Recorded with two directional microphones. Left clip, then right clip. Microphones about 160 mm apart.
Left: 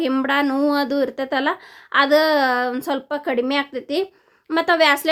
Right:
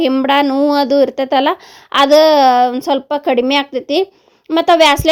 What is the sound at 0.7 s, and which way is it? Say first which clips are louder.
A woman's voice: right 8 dB; 35° right (ahead or behind).